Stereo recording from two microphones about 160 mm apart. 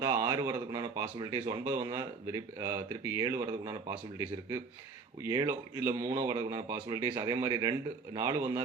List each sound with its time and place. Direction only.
0.0 s speech: 20° right (ahead or behind)
5.2 s speech: 15° right (ahead or behind)